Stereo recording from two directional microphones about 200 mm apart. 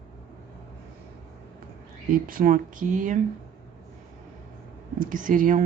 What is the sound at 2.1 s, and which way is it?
Speech, 45° right (ahead or behind).